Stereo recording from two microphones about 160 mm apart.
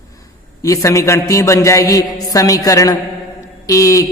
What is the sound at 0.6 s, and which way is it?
A man's voice, 20° left (ahead or behind).